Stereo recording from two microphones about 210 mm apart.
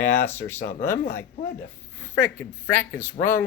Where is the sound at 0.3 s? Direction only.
10° left (ahead or behind).